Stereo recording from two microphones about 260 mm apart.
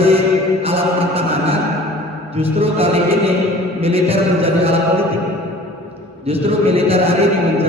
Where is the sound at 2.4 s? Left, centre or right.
Right.